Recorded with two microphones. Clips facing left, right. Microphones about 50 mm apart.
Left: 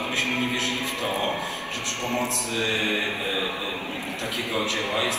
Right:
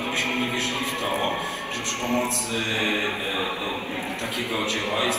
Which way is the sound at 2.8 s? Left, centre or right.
Right.